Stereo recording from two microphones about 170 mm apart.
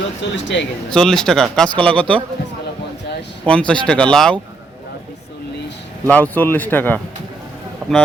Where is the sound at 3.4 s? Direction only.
5° left (ahead or behind).